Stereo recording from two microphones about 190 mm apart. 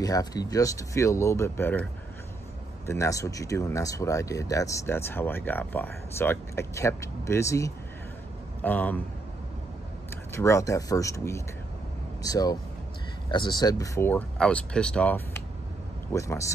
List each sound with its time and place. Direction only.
0.0 s speech: 20° left (ahead or behind)
2.9 s speech: 15° left (ahead or behind)
10.3 s speech: 15° left (ahead or behind)